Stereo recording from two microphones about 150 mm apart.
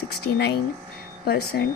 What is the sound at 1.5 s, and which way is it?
Speech, 90° left.